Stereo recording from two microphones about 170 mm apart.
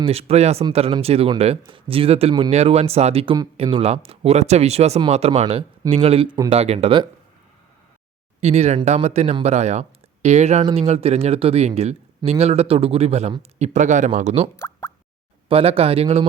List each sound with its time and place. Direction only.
0.0 s speech: 35° right (ahead or behind)
8.4 s speech: 40° right (ahead or behind)
14.5 s plop: 15° left (ahead or behind)
15.4 s speech: 35° right (ahead or behind)